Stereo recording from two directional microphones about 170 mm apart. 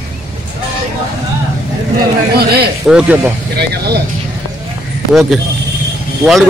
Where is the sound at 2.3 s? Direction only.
65° right (ahead or behind).